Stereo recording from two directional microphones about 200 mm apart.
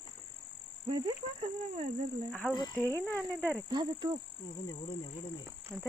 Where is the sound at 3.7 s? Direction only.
20° right (ahead or behind).